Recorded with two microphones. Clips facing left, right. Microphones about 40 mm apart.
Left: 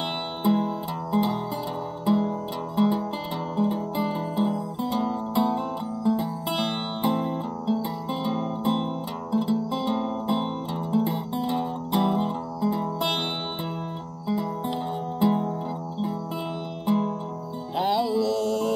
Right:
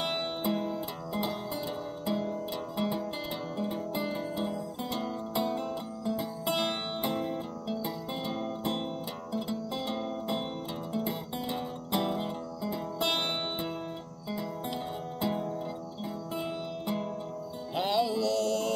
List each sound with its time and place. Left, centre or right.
0.4 s music: centre
11.4 s music: centre
14.2 s music: centre
16.8 s music: centre
17.7 s mantra: centre